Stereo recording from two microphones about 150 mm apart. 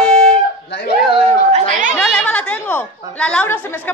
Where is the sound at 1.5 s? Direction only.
55° right (ahead or behind).